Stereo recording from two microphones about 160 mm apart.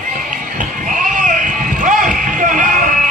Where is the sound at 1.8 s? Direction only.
55° right (ahead or behind).